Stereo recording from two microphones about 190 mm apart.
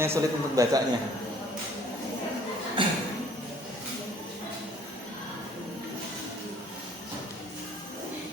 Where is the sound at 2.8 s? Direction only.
25° right (ahead or behind).